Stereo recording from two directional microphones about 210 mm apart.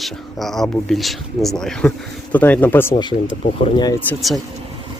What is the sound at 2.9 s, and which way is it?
Speech, 25° left (ahead or behind).